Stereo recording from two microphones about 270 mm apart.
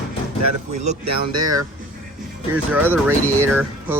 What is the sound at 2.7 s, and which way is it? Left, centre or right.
Speech, centre.